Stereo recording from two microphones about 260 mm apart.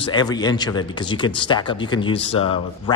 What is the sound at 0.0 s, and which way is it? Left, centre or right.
A man's voice, centre.